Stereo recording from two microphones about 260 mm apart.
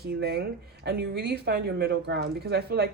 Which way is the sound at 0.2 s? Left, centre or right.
Right.